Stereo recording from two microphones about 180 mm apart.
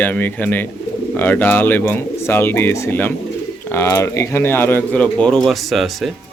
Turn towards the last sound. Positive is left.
turn(degrees=0)  # may be behind; listen again after turning